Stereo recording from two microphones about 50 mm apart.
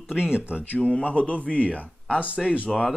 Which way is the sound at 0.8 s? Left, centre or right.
Left.